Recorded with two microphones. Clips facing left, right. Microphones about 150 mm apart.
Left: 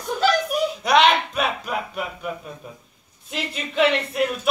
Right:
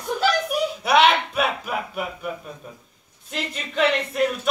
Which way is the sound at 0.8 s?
10° right (ahead or behind).